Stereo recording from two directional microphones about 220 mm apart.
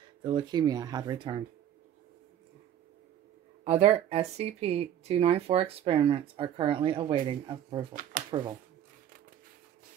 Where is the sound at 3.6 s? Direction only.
30° right (ahead or behind).